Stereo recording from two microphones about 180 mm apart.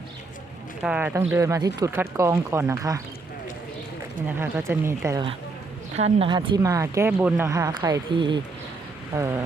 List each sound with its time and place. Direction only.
0.8 s speech: 5° right (ahead or behind)
4.3 s speech: 10° right (ahead or behind)
6.0 s speech: 35° right (ahead or behind)